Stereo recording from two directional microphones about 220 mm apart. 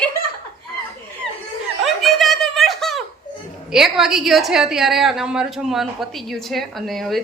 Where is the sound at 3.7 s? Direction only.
Centre (ahead or behind).